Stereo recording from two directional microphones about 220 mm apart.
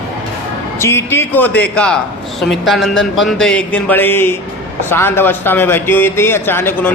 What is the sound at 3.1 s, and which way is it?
Speech, centre (ahead or behind).